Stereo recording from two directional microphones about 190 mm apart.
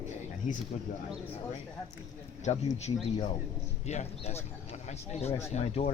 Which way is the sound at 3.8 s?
35° left (ahead or behind).